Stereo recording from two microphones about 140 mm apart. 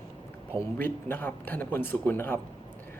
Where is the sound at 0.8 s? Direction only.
15° left (ahead or behind).